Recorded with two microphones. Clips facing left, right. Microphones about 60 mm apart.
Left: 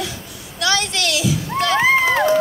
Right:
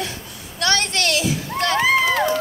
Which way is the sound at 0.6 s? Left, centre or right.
Right.